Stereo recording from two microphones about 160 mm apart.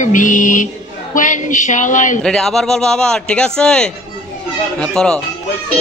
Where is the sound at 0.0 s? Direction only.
55° left (ahead or behind).